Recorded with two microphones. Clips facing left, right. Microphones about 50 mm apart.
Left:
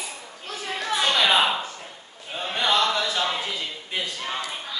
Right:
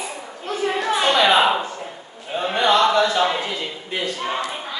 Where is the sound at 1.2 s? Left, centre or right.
Centre.